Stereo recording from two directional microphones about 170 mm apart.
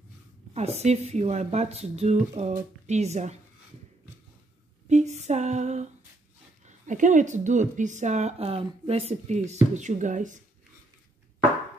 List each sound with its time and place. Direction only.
0.6 s a woman's voice: 40° right (ahead or behind)
4.8 s speech: 45° right (ahead or behind)